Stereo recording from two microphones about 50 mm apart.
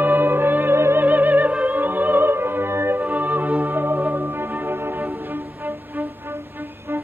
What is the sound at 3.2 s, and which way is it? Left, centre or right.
Music, right.